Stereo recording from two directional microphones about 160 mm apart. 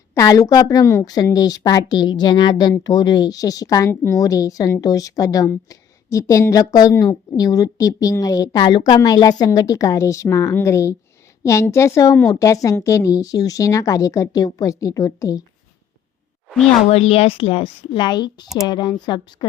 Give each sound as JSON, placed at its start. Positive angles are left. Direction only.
{"t": 0.1, "sound": "a woman's voice", "side_deg": 20}
{"t": 16.9, "sound": "a woman's voice", "side_deg": 40}